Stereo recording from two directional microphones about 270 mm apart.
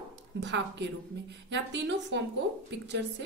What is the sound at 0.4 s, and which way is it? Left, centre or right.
A woman's voice, right.